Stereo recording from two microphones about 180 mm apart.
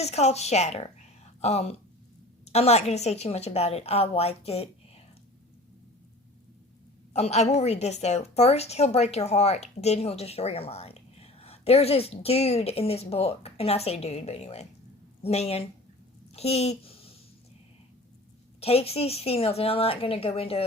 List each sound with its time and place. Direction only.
0.0 s a woman's voice: 35° left (ahead or behind)
7.1 s a woman's voice: 40° left (ahead or behind)
18.6 s a woman's voice: 35° left (ahead or behind)